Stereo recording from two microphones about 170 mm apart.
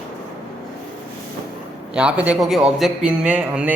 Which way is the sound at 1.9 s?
5° right (ahead or behind).